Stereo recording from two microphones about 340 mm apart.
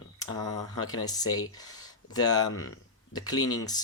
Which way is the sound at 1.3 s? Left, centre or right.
Left.